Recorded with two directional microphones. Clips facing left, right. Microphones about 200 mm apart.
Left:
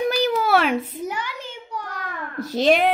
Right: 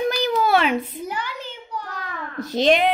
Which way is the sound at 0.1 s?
5° left (ahead or behind).